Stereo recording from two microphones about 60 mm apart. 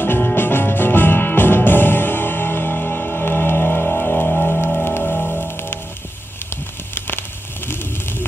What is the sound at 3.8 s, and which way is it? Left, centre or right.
Music, left.